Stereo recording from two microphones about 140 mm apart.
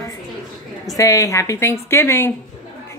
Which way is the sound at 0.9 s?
25° left (ahead or behind).